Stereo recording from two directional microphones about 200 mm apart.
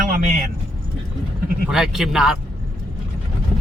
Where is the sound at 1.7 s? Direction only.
Centre (ahead or behind).